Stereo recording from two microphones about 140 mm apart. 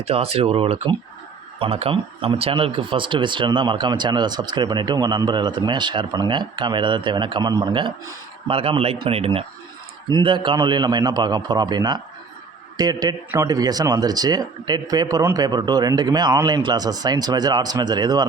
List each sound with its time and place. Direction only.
0.0 s speech: 45° right (ahead or behind)
10.1 s a man's voice: 35° right (ahead or behind)